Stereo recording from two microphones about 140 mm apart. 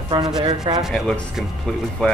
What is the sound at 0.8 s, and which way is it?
Speech, 5° right (ahead or behind).